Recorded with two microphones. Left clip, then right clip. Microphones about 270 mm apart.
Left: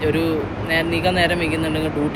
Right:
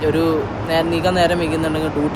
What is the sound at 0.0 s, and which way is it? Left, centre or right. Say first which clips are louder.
Speech: right 3 dB; centre.